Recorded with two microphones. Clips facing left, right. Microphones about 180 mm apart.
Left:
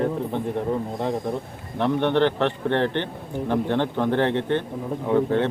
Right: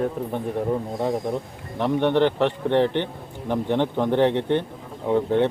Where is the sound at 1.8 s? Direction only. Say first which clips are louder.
Right 1 dB; 15° right (ahead or behind).